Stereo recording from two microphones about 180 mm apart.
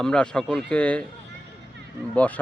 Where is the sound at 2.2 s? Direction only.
10° left (ahead or behind).